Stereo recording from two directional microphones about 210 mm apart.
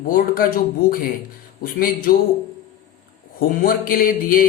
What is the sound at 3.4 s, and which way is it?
Speech, 45° left (ahead or behind).